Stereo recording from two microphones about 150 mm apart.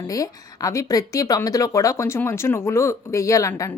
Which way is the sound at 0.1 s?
25° left (ahead or behind).